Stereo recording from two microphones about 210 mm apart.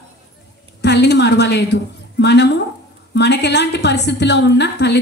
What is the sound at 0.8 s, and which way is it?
A woman's voice, 55° left (ahead or behind).